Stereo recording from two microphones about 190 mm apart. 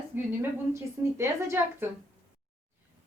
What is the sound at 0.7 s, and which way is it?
A woman's voice, 15° right (ahead or behind).